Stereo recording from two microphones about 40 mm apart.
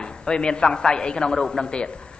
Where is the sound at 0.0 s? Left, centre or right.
Left.